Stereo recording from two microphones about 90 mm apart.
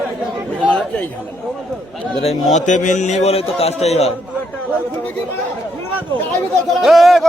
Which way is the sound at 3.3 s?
90° left.